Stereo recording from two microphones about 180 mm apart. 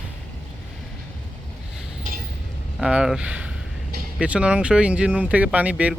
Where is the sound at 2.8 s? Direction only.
5° right (ahead or behind).